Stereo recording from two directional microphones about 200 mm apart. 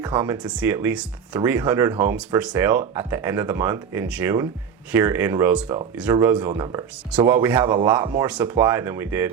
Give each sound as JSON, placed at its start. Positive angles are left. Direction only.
{"t": 0.0, "sound": "speech", "side_deg": -15}